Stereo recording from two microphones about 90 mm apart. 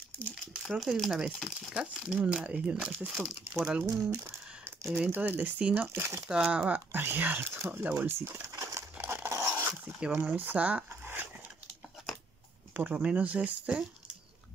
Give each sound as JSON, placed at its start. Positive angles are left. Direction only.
{"t": 0.6, "sound": "speech", "side_deg": -5}
{"t": 4.0, "sound": "a sound", "side_deg": -30}
{"t": 5.1, "sound": "speech", "side_deg": -20}
{"t": 5.9, "sound": "speech", "side_deg": -30}
{"t": 6.2, "sound": "speech", "side_deg": -10}
{"t": 8.9, "sound": "a sound", "side_deg": -25}
{"t": 10.2, "sound": "speech", "side_deg": -20}
{"t": 12.7, "sound": "speech", "side_deg": -20}